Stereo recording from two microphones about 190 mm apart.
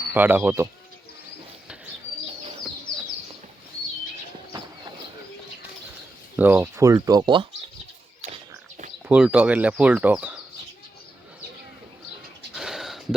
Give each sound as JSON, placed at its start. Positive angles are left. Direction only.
{"t": 0.1, "sound": "speech", "side_deg": -10}
{"t": 6.3, "sound": "speech", "side_deg": -10}
{"t": 9.0, "sound": "speech", "side_deg": -5}
{"t": 12.5, "sound": "a sound", "side_deg": 0}